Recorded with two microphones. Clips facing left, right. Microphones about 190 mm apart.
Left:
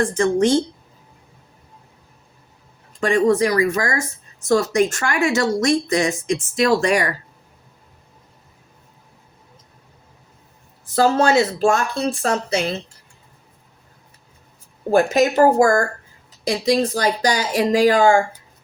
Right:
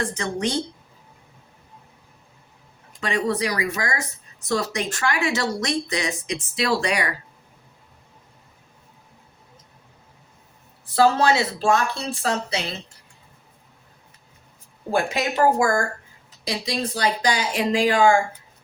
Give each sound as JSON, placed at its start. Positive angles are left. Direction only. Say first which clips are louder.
{"t": 0.0, "sound": "speech", "louder": "left 9 dB", "side_deg": 50}
{"t": 3.0, "sound": "speech", "louder": "left 8 dB", "side_deg": 50}
{"t": 10.8, "sound": "speech", "louder": "left 2 dB", "side_deg": 45}
{"t": 14.9, "sound": "speech", "louder": "left 7 dB", "side_deg": 45}